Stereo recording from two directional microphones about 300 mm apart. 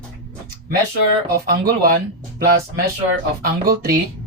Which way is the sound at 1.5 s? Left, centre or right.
Right.